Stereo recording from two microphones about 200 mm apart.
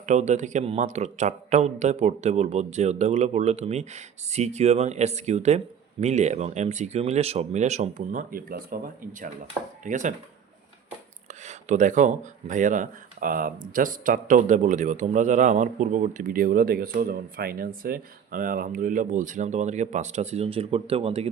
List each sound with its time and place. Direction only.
0.0 s speech: 35° right (ahead or behind)
9.8 s speech: 40° right (ahead or behind)
11.4 s speech: 40° right (ahead or behind)